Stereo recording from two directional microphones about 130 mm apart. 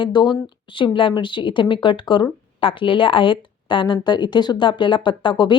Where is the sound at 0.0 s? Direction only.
35° left (ahead or behind).